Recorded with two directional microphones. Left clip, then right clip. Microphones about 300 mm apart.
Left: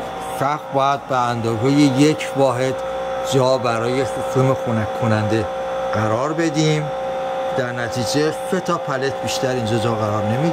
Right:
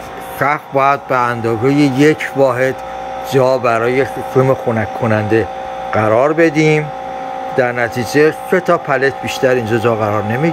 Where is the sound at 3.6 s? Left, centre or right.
Centre.